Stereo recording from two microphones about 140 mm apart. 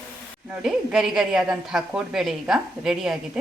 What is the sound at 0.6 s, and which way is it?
A woman's voice, centre (ahead or behind).